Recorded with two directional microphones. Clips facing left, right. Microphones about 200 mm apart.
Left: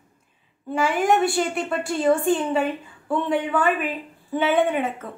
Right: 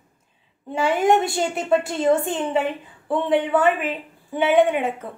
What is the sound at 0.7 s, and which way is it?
A woman's voice, 25° right (ahead or behind).